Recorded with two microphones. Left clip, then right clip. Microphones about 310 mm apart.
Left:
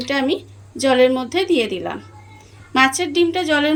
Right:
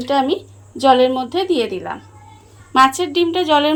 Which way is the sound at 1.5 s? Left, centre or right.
Left.